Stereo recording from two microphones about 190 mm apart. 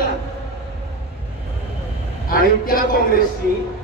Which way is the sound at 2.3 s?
50° left (ahead or behind).